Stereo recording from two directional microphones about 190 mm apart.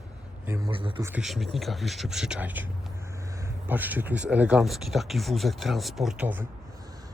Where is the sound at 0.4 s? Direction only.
15° right (ahead or behind).